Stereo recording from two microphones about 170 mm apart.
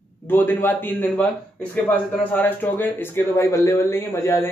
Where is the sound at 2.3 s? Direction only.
10° left (ahead or behind).